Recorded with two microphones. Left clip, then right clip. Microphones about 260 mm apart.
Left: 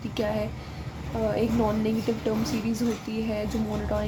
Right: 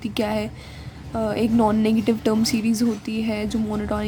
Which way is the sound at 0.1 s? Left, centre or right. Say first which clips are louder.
Right 3 dB; right.